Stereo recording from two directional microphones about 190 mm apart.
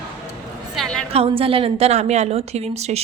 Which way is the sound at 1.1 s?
30° right (ahead or behind).